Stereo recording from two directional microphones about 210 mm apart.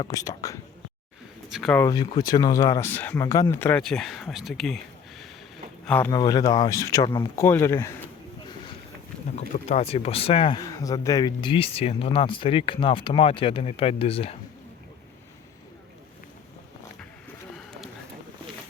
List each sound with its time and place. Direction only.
0.0 s speech: 15° left (ahead or behind)
1.5 s speech: centre (ahead or behind)
1.8 s speech: 20° left (ahead or behind)
6.1 s speech: 15° left (ahead or behind)
9.6 s speech: 30° left (ahead or behind)